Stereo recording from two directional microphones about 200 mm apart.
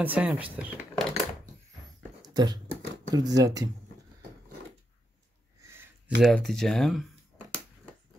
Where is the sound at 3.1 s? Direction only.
20° right (ahead or behind).